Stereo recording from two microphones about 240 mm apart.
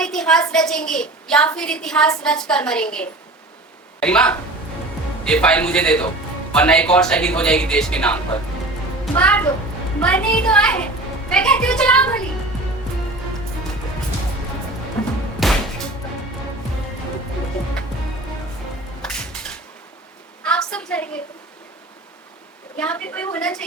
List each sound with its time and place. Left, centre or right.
0.0 s a sound: centre
0.5 s a woman's voice: centre
15.4 s music: centre
19.0 s music: centre
20.4 s a woman's voice: centre
22.8 s a woman's voice: centre